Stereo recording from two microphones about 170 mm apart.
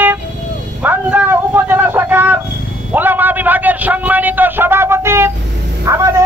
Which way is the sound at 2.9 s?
10° right (ahead or behind).